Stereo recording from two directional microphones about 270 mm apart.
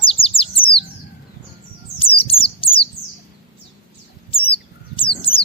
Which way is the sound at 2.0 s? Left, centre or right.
Centre.